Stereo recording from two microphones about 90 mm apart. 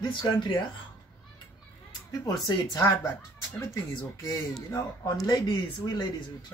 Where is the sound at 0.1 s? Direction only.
55° left (ahead or behind).